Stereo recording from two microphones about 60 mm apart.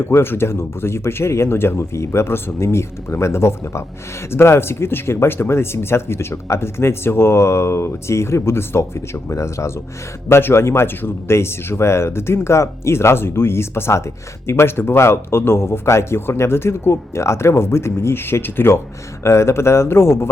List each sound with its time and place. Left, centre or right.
0.0 s speech: left
10.2 s speech: left
19.2 s speech: left